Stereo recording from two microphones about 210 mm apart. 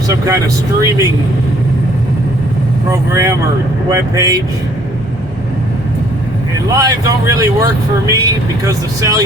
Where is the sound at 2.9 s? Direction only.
15° right (ahead or behind).